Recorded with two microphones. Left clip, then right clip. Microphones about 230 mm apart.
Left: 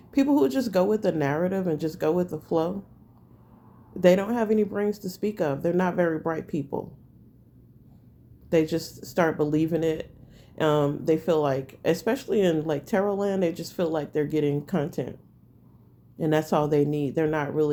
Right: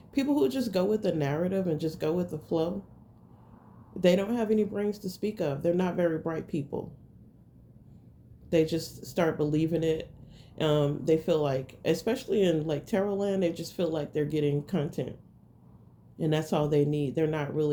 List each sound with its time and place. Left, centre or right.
0.1 s speech: left
4.0 s speech: left
8.4 s speech: left
16.1 s speech: left